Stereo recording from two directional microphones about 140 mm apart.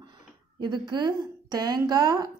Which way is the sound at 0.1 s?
35° right (ahead or behind).